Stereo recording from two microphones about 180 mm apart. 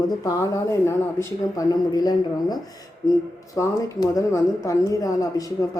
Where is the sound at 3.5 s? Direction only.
20° left (ahead or behind).